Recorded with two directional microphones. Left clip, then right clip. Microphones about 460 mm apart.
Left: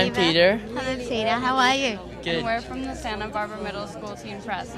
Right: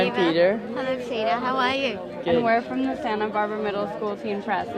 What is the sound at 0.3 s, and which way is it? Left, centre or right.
Speech, centre.